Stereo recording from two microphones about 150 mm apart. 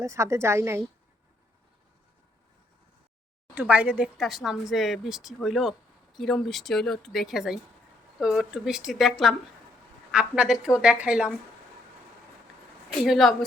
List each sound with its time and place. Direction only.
0.0 s a woman's voice: 20° right (ahead or behind)
3.5 s speech: 10° right (ahead or behind)
13.1 s speech: centre (ahead or behind)